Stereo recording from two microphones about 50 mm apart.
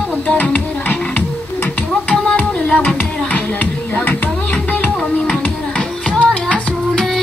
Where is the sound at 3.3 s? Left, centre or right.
Left.